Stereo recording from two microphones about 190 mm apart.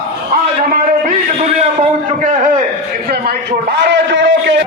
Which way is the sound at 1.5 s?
40° right (ahead or behind).